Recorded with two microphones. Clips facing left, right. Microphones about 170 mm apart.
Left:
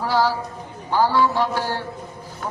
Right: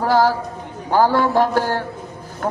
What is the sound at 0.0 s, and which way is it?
A woman's voice, 50° right (ahead or behind).